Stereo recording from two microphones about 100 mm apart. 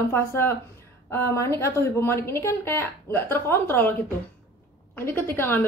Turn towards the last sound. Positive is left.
turn(degrees=20)  # may be behind; listen again after turning